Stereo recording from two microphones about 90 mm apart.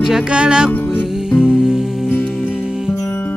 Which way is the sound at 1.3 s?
5° right (ahead or behind).